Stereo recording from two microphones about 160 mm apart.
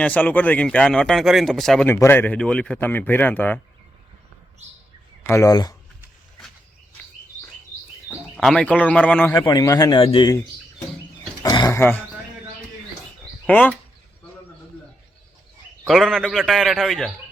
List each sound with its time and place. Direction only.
0.0 s speech: 10° left (ahead or behind)
1.9 s speech: 15° left (ahead or behind)
5.3 s a man's voice: 20° left (ahead or behind)
8.4 s speech: 5° left (ahead or behind)
9.3 s a man's voice: 25° left (ahead or behind)
11.4 s roaring cats: 20° left (ahead or behind)
11.8 s speech: 15° left (ahead or behind)
13.5 s speech: 10° left (ahead or behind)
15.9 s speech: centre (ahead or behind)